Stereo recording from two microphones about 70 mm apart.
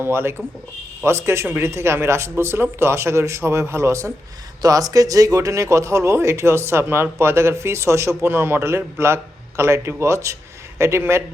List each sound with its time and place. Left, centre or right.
0.0 s speech: right
4.6 s speech: right